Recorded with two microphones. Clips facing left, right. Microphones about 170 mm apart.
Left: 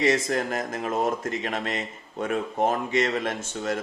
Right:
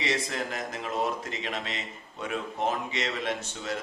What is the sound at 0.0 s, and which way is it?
Speech, 50° left (ahead or behind).